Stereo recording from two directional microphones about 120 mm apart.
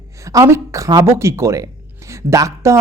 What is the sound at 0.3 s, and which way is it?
Speech, 25° right (ahead or behind).